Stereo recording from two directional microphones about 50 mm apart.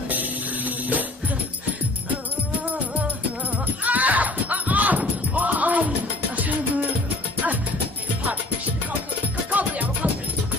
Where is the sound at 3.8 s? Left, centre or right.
Right.